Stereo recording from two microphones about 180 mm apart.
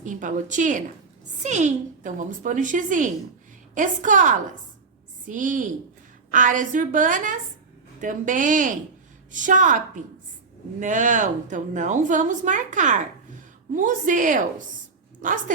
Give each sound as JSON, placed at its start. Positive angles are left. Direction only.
{"t": 0.0, "sound": "a woman's voice", "side_deg": -45}